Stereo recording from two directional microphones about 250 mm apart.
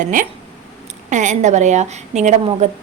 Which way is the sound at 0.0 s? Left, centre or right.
Right.